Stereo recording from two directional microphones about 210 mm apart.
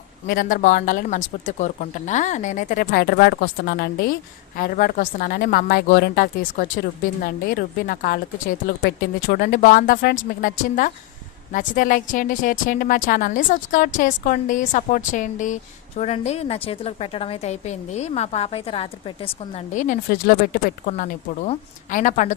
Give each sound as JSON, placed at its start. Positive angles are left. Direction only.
{"t": 0.3, "sound": "a woman's voice", "side_deg": 40}